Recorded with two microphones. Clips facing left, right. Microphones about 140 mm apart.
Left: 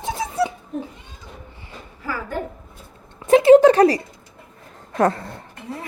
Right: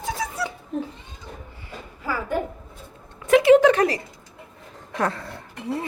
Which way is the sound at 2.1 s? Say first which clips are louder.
Right 2 dB; 15° right (ahead or behind).